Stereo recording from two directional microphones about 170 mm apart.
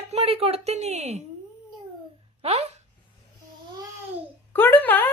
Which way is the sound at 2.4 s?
40° right (ahead or behind).